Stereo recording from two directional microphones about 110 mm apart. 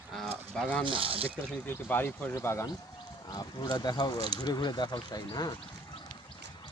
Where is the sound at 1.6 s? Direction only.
20° left (ahead or behind).